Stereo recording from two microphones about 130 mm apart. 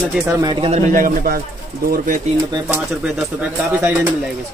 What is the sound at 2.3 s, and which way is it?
Speech, 55° right (ahead or behind).